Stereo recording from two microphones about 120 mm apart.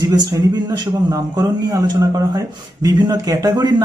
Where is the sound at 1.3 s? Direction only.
30° right (ahead or behind).